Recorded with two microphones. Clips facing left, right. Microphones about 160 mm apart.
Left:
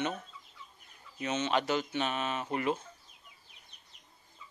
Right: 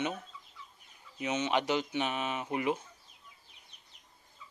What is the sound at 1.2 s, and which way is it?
Speech, 15° right (ahead or behind).